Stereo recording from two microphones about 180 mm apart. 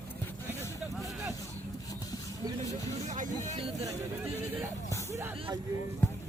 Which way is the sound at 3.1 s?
45° right (ahead or behind).